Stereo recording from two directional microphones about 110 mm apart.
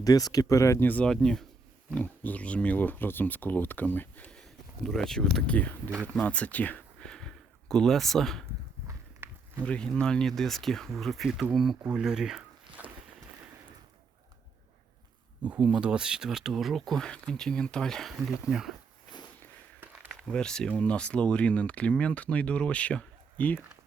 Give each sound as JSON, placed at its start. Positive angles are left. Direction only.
{"t": 0.0, "sound": "speech", "side_deg": 35}
{"t": 0.9, "sound": "speech", "side_deg": 10}
{"t": 8.9, "sound": "walk", "side_deg": -20}
{"t": 9.6, "sound": "speech", "side_deg": 10}
{"t": 15.4, "sound": "speech", "side_deg": -10}
{"t": 20.1, "sound": "speech", "side_deg": 5}